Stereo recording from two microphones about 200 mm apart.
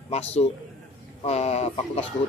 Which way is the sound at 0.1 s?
30° left (ahead or behind).